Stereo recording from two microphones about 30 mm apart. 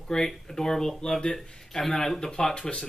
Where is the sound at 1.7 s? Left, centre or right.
Centre.